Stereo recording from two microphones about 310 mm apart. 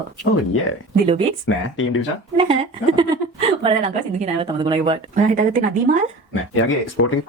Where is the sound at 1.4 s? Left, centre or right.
Left.